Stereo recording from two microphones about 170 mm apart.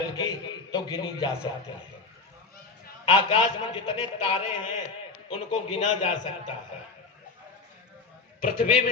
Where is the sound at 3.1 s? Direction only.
35° left (ahead or behind).